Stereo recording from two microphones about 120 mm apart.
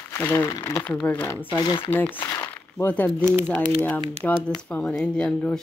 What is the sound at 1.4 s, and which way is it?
Speech, 40° left (ahead or behind).